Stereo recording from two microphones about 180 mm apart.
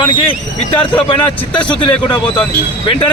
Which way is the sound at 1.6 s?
25° left (ahead or behind).